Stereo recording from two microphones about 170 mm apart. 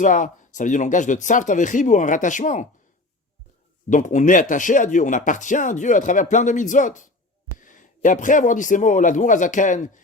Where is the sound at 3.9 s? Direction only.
45° left (ahead or behind).